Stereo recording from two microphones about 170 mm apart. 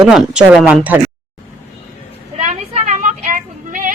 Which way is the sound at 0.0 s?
5° right (ahead or behind).